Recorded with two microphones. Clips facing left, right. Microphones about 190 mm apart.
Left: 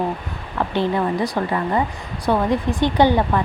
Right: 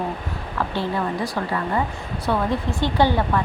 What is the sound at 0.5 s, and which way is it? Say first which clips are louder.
A woman's voice: left 4 dB; 20° left (ahead or behind).